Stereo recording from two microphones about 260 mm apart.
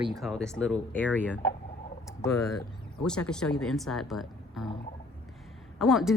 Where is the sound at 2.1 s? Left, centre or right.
Centre.